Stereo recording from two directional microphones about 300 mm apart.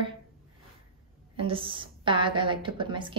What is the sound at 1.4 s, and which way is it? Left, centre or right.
Speech, centre.